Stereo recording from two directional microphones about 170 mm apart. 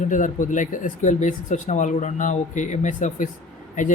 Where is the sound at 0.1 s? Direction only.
50° left (ahead or behind).